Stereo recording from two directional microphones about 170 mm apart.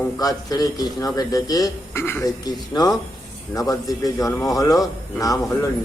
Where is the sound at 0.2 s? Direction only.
20° left (ahead or behind).